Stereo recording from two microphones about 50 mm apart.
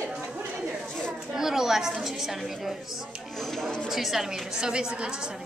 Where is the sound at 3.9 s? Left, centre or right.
Centre.